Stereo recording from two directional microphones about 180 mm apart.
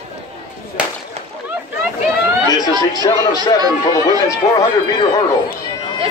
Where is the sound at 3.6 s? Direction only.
20° right (ahead or behind).